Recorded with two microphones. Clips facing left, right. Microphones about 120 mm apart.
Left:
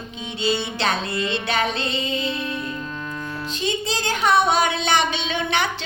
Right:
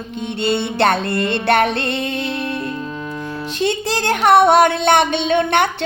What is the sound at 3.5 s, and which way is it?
Music, 70° right (ahead or behind).